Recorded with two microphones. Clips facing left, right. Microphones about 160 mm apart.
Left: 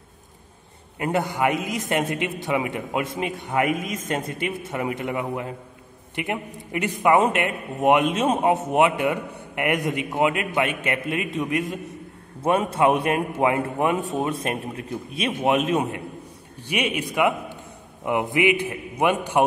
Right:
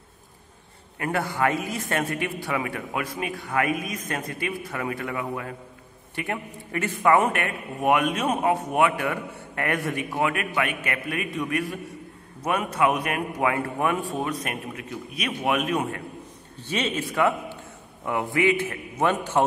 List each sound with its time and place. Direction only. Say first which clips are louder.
0.9 s a man's voice: left 3 dB; 20° left (ahead or behind)